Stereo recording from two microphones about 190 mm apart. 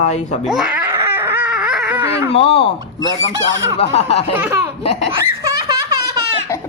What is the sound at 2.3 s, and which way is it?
Speech, 30° left (ahead or behind).